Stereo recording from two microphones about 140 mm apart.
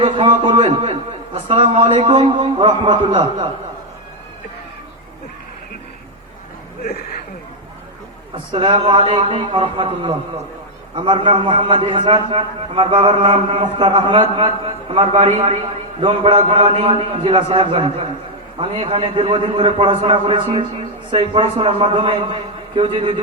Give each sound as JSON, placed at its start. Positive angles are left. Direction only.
{"t": 0.0, "sound": "a man's voice", "side_deg": -35}
{"t": 6.8, "sound": "speech", "side_deg": 90}
{"t": 8.5, "sound": "a man's voice", "side_deg": -40}